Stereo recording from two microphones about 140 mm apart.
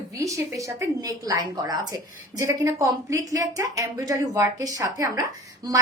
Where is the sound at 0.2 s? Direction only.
25° right (ahead or behind).